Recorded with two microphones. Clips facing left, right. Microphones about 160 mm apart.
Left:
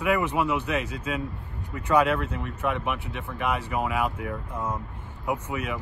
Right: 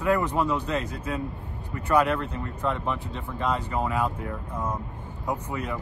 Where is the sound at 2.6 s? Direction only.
10° left (ahead or behind).